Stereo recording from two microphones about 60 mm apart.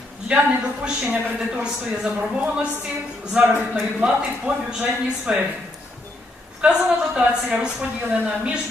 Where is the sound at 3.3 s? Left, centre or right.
Centre.